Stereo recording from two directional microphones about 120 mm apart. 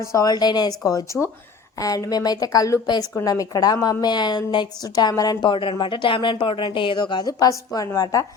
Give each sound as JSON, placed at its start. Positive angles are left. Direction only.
{"t": 0.0, "sound": "a woman's voice", "side_deg": 25}